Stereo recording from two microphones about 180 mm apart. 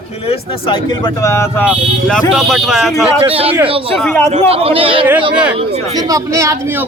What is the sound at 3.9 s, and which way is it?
Speech, 5° left (ahead or behind).